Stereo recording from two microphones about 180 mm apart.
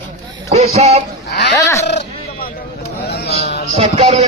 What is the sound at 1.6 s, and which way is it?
Speech, 15° left (ahead or behind).